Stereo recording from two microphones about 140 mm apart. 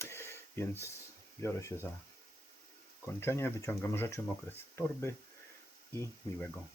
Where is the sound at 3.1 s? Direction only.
15° left (ahead or behind).